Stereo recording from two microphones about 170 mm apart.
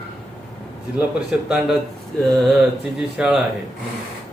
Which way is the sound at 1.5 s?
Centre (ahead or behind).